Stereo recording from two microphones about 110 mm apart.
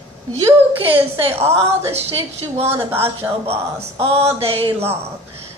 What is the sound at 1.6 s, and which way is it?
A woman's voice, 65° right (ahead or behind).